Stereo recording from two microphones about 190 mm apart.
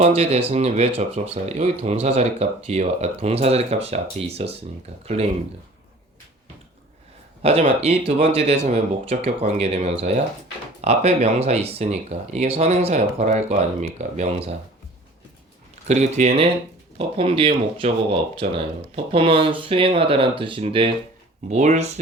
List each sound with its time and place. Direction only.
0.0 s speech: 35° right (ahead or behind)
7.4 s speech: 35° right (ahead or behind)
15.9 s speech: 35° right (ahead or behind)
21.5 s speech: 40° right (ahead or behind)